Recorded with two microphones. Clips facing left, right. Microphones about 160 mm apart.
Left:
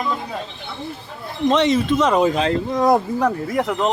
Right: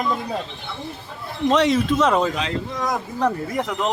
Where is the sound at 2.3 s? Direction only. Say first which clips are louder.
Left 7 dB; 35° left (ahead or behind).